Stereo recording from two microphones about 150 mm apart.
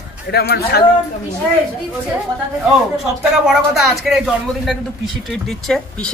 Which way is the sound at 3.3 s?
5° right (ahead or behind).